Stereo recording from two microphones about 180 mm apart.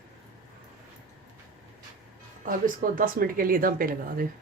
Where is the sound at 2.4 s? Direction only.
50° right (ahead or behind).